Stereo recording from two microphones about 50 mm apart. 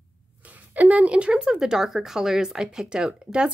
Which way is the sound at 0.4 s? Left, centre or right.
Right.